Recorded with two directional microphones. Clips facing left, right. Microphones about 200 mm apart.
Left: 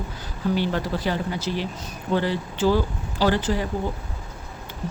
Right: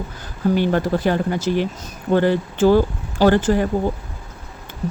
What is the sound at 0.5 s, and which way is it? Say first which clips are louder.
Speech: right 6 dB; 50° right (ahead or behind).